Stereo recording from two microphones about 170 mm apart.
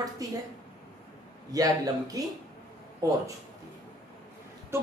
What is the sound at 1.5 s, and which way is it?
Speech, 20° right (ahead or behind).